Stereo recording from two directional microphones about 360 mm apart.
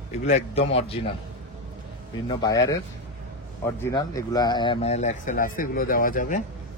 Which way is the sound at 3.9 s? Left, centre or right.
Centre.